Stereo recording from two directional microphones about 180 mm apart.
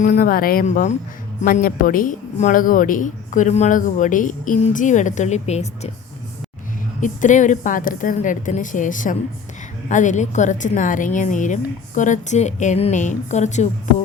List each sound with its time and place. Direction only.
0.0 s speech: 50° left (ahead or behind)
7.0 s speech: 45° left (ahead or behind)